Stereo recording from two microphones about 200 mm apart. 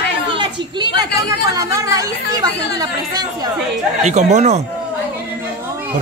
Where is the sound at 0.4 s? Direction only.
20° right (ahead or behind).